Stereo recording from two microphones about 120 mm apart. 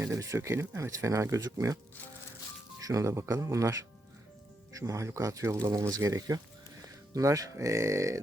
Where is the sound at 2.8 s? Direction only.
25° right (ahead or behind).